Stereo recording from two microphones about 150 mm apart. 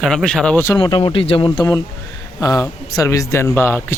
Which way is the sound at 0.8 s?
35° left (ahead or behind).